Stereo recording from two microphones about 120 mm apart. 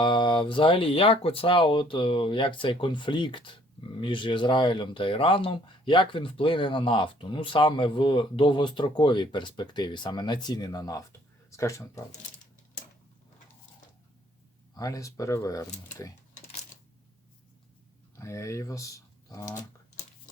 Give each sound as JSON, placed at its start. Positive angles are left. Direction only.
{"t": 0.0, "sound": "speech", "side_deg": 40}
{"t": 14.8, "sound": "speech", "side_deg": 30}
{"t": 18.2, "sound": "speech", "side_deg": 25}